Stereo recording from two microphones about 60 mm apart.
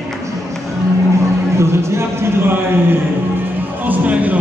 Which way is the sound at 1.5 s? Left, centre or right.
Right.